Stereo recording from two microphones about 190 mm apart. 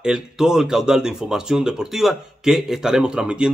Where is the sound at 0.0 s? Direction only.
5° right (ahead or behind).